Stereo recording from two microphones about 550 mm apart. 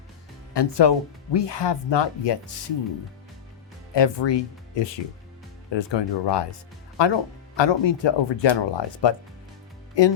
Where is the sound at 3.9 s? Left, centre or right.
Left.